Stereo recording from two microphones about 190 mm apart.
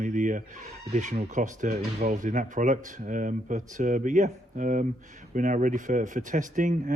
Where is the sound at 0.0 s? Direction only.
40° right (ahead or behind).